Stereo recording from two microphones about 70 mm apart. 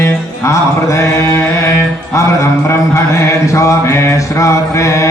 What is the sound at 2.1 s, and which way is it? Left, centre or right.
Mantra, left.